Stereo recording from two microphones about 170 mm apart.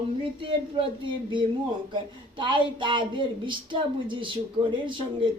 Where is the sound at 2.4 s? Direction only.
30° right (ahead or behind).